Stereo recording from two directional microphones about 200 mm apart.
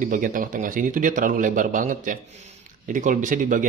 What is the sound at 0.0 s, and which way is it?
Speech, 40° right (ahead or behind).